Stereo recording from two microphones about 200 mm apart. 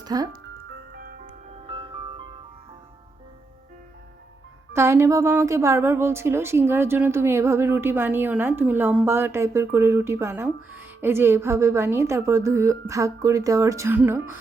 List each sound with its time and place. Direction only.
0.0 s a child's voice: 20° right (ahead or behind)
0.9 s music: 45° right (ahead or behind)
1.6 s music: 25° right (ahead or behind)
4.7 s a woman's voice: 15° right (ahead or behind)